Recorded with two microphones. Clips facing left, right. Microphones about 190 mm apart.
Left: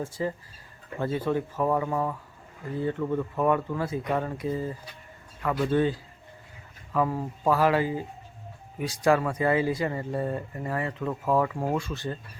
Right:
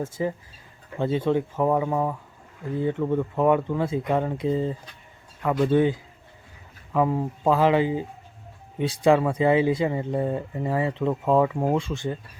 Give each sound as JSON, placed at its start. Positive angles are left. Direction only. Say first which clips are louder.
{"t": 0.2, "sound": "a man's voice", "louder": "right 3 dB", "side_deg": -15}